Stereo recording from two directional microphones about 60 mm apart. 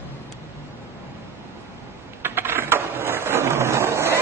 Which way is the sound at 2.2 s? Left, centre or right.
Right.